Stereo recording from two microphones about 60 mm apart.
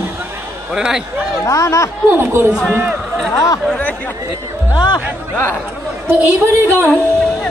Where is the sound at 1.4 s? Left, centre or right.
Left.